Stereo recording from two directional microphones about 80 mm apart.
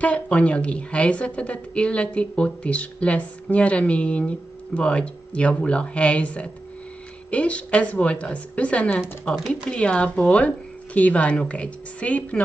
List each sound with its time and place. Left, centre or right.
0.0 s speech: centre